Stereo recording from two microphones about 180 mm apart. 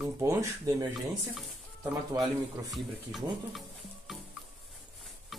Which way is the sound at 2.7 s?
Centre (ahead or behind).